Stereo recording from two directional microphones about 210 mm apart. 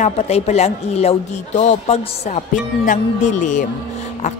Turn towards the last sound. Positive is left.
turn(degrees=35)  # may be behind; listen again after turning